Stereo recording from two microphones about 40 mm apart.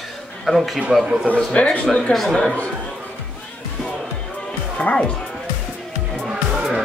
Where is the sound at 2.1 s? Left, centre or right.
Centre.